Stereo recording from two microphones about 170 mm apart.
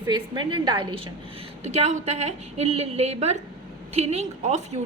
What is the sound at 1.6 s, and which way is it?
A woman's voice, 40° right (ahead or behind).